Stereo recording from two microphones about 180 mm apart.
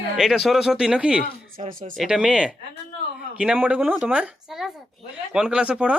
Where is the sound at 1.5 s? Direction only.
50° right (ahead or behind).